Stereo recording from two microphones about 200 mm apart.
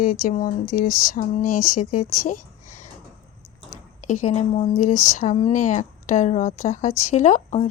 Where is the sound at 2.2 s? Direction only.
40° left (ahead or behind).